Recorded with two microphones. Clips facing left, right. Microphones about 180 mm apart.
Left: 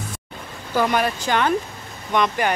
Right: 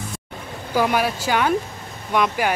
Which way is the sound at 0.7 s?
5° right (ahead or behind).